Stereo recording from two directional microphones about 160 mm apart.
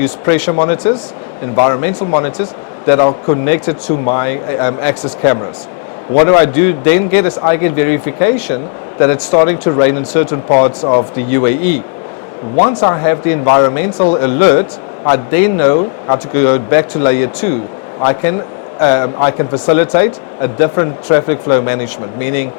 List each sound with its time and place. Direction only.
0.0 s speech: 15° left (ahead or behind)
10.6 s speech: 30° left (ahead or behind)
11.3 s speech: 15° left (ahead or behind)
12.5 s speech: 30° left (ahead or behind)